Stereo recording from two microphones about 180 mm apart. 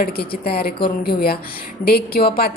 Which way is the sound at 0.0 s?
60° left (ahead or behind).